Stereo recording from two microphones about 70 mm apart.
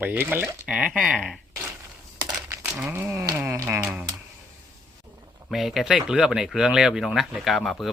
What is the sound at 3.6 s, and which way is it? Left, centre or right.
Speech, right.